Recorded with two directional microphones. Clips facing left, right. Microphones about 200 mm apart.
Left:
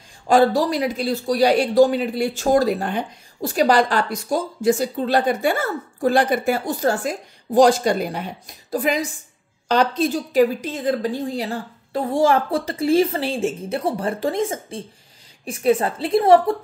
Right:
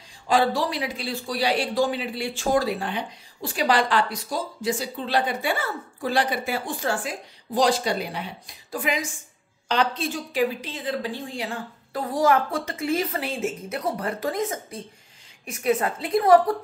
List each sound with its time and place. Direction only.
0.3 s a woman's voice: 45° left (ahead or behind); by 16.5 s 30° left (ahead or behind)